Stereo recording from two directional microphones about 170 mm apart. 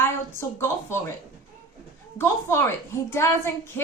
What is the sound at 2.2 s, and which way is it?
A woman's voice, 15° left (ahead or behind).